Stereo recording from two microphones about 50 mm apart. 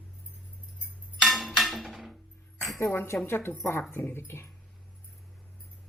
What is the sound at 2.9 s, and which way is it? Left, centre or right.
Speech, left.